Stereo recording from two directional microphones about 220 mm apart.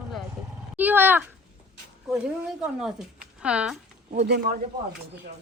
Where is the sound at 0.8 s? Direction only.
10° right (ahead or behind).